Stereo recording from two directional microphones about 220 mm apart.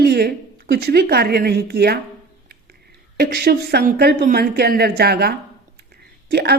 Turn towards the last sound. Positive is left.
turn(degrees=-45)  # may be behind; listen again after turning